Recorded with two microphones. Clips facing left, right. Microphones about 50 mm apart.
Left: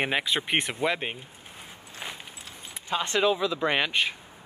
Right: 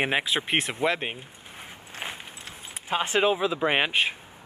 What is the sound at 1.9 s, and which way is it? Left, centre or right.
Keys jangling, right.